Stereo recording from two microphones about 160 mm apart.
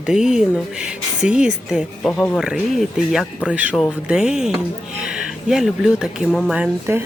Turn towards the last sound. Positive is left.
turn(degrees=-15)  # may be behind; listen again after turning